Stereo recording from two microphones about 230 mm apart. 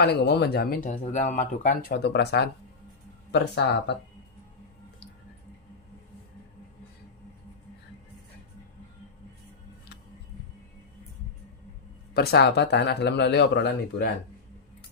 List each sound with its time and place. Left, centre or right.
0.0 s speech: left
12.1 s speech: left